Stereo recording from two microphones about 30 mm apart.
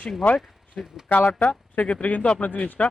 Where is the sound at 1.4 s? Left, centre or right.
Left.